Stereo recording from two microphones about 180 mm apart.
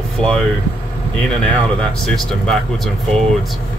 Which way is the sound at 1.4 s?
5° left (ahead or behind).